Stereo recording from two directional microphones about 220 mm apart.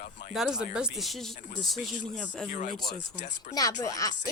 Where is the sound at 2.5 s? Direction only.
35° left (ahead or behind).